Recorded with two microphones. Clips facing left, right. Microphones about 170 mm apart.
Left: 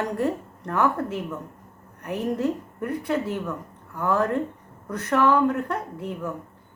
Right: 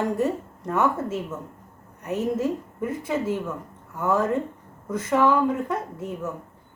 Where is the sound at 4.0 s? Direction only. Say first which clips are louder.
Right 1 dB; 5° right (ahead or behind).